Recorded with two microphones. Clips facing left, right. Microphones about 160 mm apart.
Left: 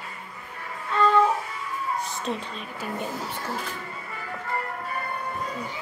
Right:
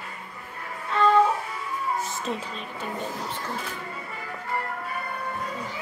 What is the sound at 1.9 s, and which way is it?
Speech, centre (ahead or behind).